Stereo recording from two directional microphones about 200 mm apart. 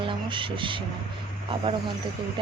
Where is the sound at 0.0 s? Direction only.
25° right (ahead or behind).